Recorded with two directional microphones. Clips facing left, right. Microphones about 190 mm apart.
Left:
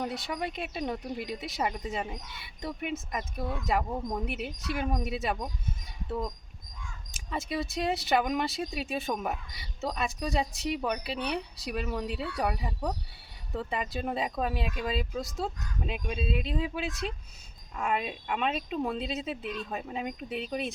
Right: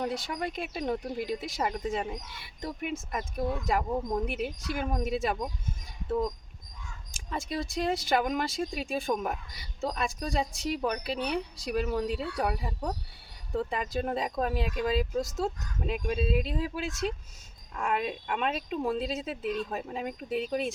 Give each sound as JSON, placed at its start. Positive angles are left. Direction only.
{"t": 0.0, "sound": "speech", "side_deg": 0}
{"t": 7.1, "sound": "speech", "side_deg": 0}